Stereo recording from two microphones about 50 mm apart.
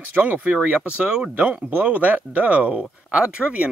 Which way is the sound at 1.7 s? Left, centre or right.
Right.